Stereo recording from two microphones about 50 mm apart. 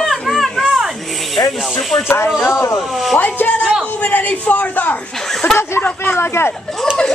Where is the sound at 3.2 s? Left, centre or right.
Left.